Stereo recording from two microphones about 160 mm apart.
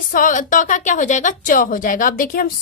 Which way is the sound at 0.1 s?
55° left (ahead or behind).